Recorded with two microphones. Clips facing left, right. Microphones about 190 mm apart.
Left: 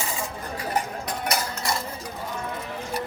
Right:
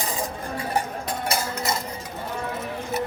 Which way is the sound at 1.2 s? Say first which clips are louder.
Right 1 dB; 25° right (ahead or behind).